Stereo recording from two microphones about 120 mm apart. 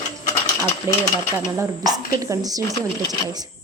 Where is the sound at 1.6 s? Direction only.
25° right (ahead or behind).